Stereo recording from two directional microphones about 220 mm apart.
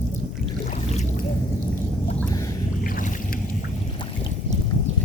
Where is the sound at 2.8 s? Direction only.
40° left (ahead or behind).